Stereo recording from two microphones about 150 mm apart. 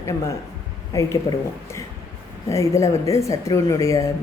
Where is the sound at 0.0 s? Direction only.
20° left (ahead or behind).